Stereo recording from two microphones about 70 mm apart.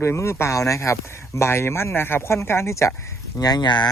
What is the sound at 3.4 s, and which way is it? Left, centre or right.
Speech, left.